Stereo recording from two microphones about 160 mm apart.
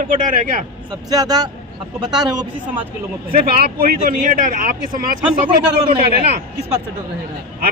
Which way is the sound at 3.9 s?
60° right (ahead or behind).